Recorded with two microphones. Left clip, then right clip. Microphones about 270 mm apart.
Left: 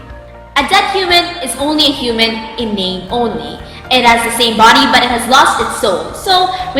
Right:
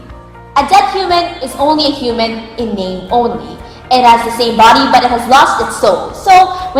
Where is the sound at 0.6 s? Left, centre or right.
Centre.